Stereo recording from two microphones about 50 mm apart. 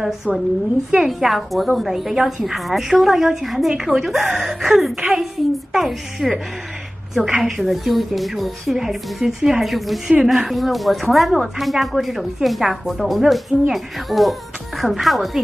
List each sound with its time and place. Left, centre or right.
1.0 s speech: centre
7.2 s a woman's voice: right
7.4 s speech: centre